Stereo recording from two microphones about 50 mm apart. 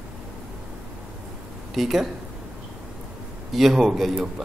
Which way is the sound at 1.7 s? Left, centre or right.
Centre.